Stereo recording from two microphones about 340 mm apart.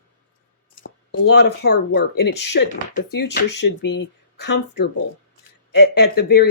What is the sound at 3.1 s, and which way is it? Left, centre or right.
Speech, left.